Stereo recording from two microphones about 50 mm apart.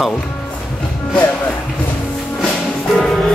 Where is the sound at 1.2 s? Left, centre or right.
Left.